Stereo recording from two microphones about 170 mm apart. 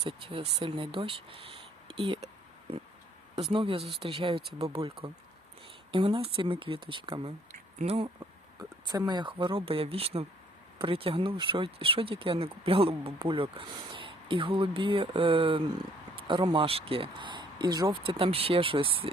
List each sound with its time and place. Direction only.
0.0 s speech: 30° right (ahead or behind)
3.5 s speech: 30° right (ahead or behind)
5.9 s speech: 30° right (ahead or behind)
8.9 s speech: 25° right (ahead or behind)